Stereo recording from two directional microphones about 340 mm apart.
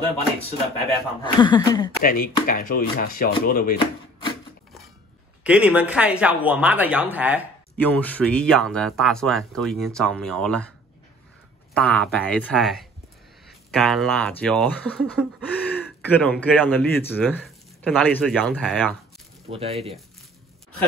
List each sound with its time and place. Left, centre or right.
1.2 s speech: centre
2.0 s speech: left
5.4 s speech: centre
11.7 s speech: centre
19.5 s speech: centre